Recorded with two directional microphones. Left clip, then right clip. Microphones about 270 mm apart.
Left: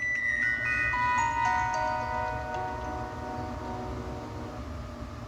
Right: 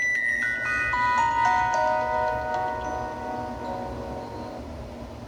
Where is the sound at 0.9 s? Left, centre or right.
Right.